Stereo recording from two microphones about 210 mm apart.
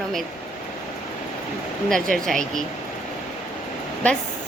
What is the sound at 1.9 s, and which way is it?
Speech, centre (ahead or behind).